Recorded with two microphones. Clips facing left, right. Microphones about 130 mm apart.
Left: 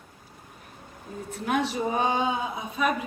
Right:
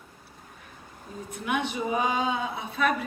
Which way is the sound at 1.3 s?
35° left (ahead or behind).